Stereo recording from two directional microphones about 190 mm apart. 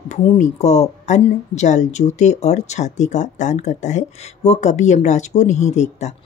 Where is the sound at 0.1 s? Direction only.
40° left (ahead or behind).